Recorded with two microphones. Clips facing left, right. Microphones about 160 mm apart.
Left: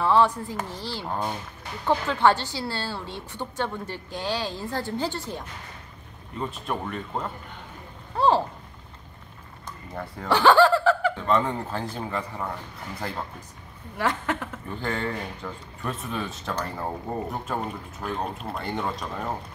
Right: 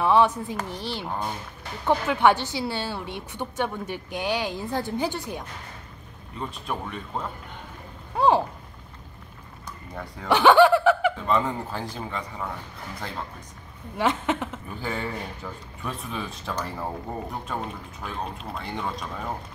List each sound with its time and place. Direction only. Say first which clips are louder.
0.0 s a woman's voice: right 1 dB; 15° right (ahead or behind)
6.3 s speech: left 2 dB; centre (ahead or behind)
8.2 s a woman's voice: right 1 dB; 15° right (ahead or behind)
10.2 s laughter: right 2 dB; 20° right (ahead or behind)
11.1 s speech: left 1 dB; centre (ahead or behind)
13.9 s speech: right 2 dB; 20° right (ahead or behind)
14.8 s speech: left 2 dB; 5° right (ahead or behind)